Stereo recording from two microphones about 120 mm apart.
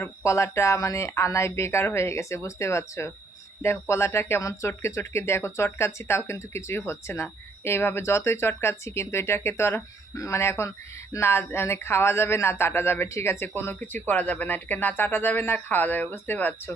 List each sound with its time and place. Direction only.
0.0 s speech: 25° left (ahead or behind)